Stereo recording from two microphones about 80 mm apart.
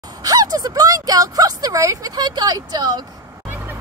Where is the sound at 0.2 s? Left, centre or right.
Right.